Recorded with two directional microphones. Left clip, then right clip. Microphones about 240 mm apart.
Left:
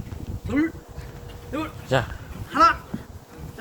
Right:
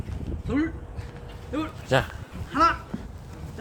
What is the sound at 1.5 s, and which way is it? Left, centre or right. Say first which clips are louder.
Speech: even; centre.